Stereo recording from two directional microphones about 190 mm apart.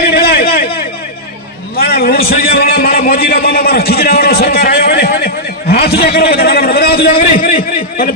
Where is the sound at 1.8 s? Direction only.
55° left (ahead or behind).